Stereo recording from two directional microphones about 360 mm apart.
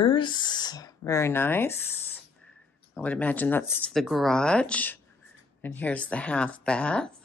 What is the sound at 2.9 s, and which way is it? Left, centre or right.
Speech, centre.